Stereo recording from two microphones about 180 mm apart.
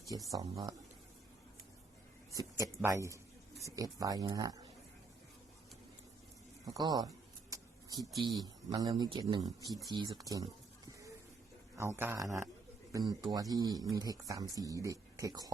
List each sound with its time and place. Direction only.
0.1 s speech: 20° right (ahead or behind)
2.3 s speech: 20° right (ahead or behind)
6.7 s speech: 20° right (ahead or behind)
8.2 s speech: 25° right (ahead or behind)
11.8 s speech: 15° right (ahead or behind)